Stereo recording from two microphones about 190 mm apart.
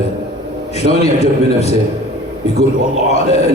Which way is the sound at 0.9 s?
35° left (ahead or behind).